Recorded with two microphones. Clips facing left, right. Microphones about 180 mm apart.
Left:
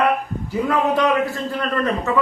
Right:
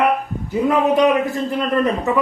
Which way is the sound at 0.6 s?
20° right (ahead or behind).